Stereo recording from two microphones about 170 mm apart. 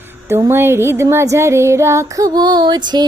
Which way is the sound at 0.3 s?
15° right (ahead or behind).